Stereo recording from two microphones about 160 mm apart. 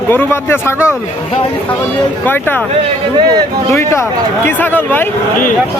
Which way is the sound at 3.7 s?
15° left (ahead or behind).